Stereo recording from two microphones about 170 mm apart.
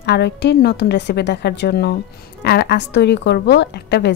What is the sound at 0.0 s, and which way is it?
Speech, 80° left.